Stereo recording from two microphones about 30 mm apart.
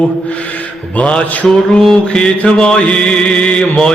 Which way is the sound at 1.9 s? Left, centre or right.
Left.